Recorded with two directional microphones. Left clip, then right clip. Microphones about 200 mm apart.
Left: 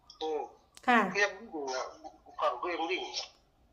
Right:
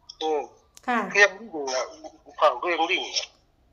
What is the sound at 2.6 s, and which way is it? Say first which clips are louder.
Speech: right 10 dB; 55° right (ahead or behind).